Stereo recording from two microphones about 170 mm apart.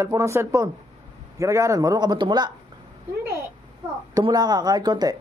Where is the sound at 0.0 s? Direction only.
15° right (ahead or behind).